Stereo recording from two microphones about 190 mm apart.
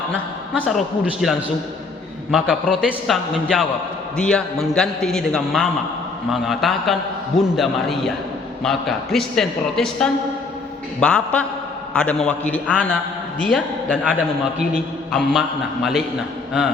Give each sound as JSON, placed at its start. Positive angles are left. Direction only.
{"t": 0.6, "sound": "a man's voice", "side_deg": 0}